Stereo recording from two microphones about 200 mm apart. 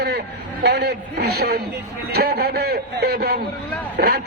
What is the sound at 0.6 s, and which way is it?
A man's voice, 55° right (ahead or behind).